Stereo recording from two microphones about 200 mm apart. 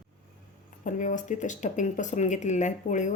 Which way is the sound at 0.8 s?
40° left (ahead or behind).